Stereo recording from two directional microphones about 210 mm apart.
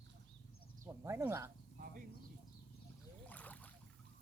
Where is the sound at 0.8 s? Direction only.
10° right (ahead or behind).